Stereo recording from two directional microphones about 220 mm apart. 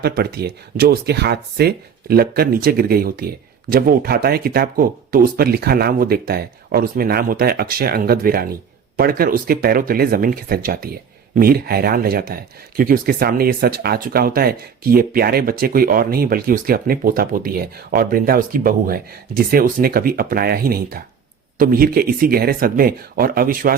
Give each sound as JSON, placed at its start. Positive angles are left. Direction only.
{"t": 0.0, "sound": "speech", "side_deg": -45}